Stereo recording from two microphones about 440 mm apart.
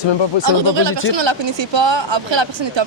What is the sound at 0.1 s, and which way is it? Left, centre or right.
Speech, left.